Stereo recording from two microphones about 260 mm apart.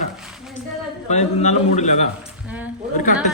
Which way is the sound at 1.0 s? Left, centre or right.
Left.